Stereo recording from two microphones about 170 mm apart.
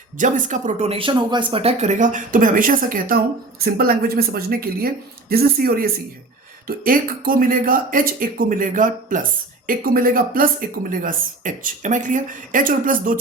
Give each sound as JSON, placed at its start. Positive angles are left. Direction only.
{"t": 0.2, "sound": "speech", "side_deg": -50}